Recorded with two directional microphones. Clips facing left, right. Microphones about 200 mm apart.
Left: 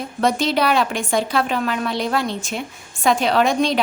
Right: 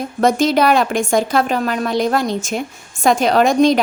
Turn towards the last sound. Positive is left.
turn(degrees=-45)  # may be behind; listen again after turning